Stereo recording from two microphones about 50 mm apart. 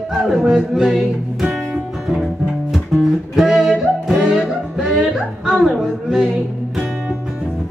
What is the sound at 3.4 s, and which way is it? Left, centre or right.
Music, centre.